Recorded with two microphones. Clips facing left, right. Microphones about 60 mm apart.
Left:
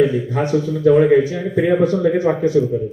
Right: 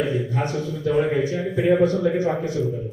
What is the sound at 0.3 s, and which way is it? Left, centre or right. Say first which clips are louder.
Speech: left 7 dB; left.